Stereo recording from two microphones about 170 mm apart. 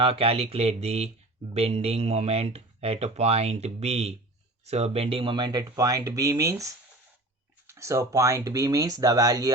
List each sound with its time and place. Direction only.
0.0 s speech: 35° right (ahead or behind)